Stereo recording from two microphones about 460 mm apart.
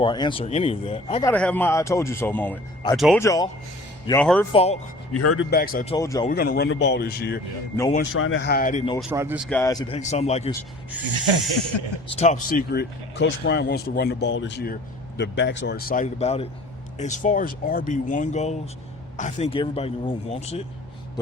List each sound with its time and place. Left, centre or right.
0.0 s speech: centre
5.1 s speech: left; by 6.3 s centre
6.3 s speech: centre
8.1 s speech: left
9.0 s speech: centre
11.7 s a man's voice: left
12.1 s speech: centre